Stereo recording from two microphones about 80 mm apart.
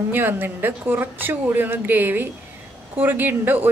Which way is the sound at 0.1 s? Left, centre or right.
Right.